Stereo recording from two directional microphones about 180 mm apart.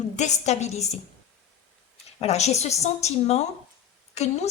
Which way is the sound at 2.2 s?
35° left (ahead or behind).